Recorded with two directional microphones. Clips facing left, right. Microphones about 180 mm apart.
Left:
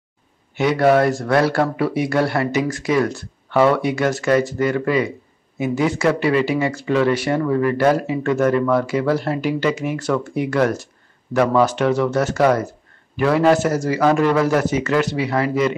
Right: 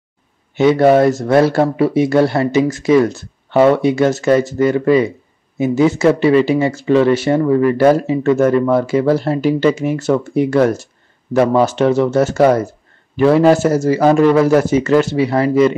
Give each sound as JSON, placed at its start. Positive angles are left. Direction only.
{"t": 0.6, "sound": "speech", "side_deg": -25}